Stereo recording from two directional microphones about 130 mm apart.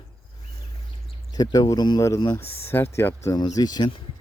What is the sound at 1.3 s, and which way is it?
Speech, 30° left (ahead or behind).